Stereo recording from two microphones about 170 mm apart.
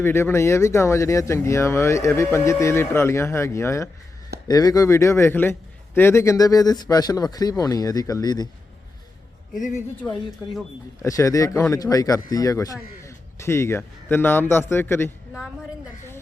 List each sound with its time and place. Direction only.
0.0 s a man's voice: 15° left (ahead or behind)
9.6 s a woman's voice: 45° left (ahead or behind)
10.0 s speech: 5° left (ahead or behind)
11.0 s a man's voice: 20° left (ahead or behind)